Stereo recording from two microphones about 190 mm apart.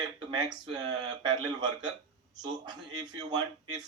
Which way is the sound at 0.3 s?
20° right (ahead or behind).